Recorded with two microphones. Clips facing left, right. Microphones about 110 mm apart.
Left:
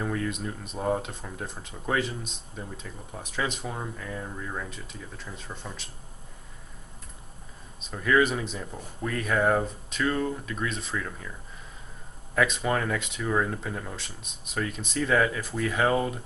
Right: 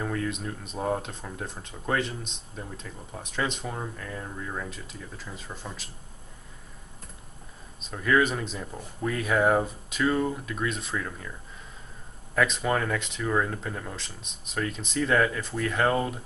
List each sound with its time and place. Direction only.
0.0 s speech: centre (ahead or behind)
7.8 s speech: centre (ahead or behind)
12.4 s speech: centre (ahead or behind)